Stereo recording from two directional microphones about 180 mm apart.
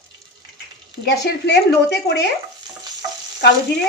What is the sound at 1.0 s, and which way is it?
Speech, 65° left (ahead or behind).